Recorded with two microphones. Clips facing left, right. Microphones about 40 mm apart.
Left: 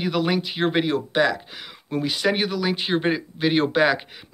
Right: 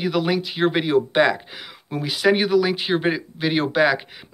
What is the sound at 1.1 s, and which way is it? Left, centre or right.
Speech, right.